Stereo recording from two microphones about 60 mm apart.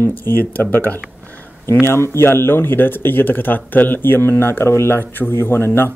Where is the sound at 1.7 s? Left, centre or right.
Left.